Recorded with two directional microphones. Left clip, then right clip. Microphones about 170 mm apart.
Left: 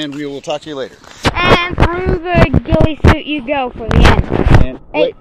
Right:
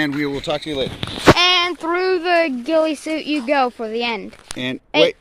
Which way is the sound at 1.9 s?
10° right (ahead or behind).